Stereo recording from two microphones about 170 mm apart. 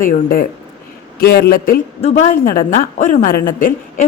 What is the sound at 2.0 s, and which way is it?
Speech, 35° left (ahead or behind).